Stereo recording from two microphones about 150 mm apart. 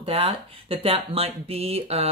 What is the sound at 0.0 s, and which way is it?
Speech, 40° right (ahead or behind).